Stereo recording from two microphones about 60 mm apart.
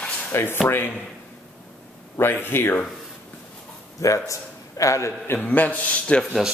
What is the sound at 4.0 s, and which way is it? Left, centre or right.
A man's voice, left.